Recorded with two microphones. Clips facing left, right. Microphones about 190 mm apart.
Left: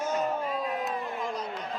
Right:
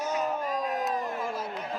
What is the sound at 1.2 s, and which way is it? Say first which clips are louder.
Chop: even; 5° right (ahead or behind).